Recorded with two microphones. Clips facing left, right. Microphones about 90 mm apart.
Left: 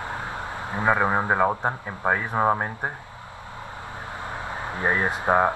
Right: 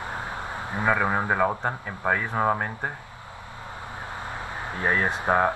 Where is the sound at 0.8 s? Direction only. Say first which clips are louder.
Left 2 dB; 20° left (ahead or behind).